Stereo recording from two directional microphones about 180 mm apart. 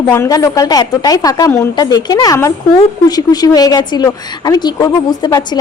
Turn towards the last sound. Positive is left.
turn(degrees=25)  # may be behind; listen again after turning